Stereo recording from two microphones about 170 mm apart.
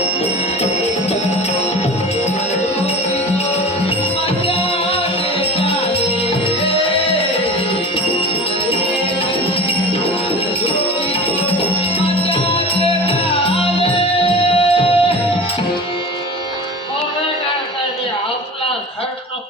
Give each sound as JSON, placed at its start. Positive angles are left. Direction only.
{"t": 5.5, "sound": "music", "side_deg": 35}
{"t": 11.9, "sound": "music", "side_deg": 35}